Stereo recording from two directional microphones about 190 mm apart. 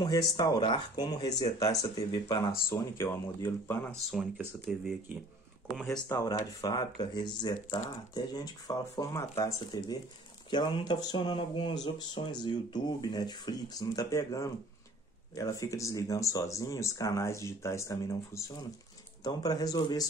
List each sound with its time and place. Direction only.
0.0 s speech: 20° left (ahead or behind); by 4.8 s centre (ahead or behind)
5.9 s speech: 15° left (ahead or behind)